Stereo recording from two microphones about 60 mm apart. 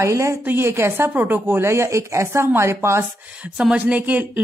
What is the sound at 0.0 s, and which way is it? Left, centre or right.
Speech, right.